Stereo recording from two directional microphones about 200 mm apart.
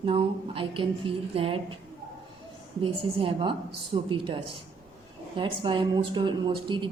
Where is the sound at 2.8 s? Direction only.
25° right (ahead or behind).